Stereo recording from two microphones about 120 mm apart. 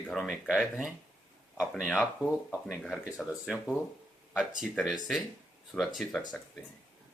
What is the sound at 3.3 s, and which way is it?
Speech, centre (ahead or behind).